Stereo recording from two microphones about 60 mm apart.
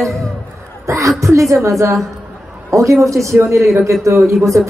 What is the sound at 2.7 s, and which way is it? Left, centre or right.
A woman's voice, right.